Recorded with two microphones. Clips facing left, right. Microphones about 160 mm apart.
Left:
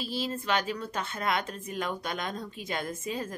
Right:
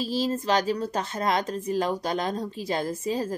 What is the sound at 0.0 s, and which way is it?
A woman's voice, 40° right (ahead or behind).